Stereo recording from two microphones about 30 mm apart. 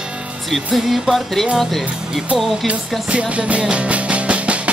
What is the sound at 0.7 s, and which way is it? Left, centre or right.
Music, centre.